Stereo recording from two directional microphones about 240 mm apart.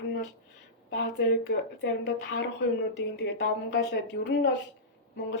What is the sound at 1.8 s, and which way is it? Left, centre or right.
A woman's voice, left.